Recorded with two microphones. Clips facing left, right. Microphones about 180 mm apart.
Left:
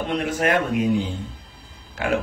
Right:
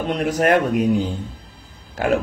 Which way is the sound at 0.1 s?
40° right (ahead or behind).